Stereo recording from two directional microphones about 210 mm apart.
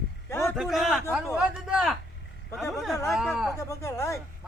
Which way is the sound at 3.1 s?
Centre (ahead or behind).